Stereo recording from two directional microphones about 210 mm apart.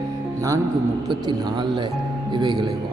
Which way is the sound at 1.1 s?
20° right (ahead or behind).